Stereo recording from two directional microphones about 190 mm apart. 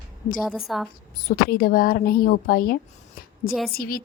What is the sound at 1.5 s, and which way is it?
A woman's voice, 50° left (ahead or behind).